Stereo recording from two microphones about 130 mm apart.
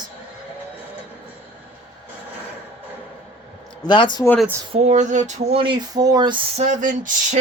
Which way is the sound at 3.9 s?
35° left (ahead or behind).